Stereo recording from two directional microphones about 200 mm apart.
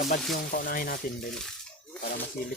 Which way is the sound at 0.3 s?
45° left (ahead or behind).